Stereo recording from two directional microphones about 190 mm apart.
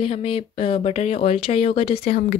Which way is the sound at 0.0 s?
30° left (ahead or behind).